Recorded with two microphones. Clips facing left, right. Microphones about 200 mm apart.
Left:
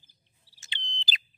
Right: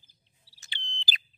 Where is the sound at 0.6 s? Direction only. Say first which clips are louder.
Left 2 dB; 20° left (ahead or behind).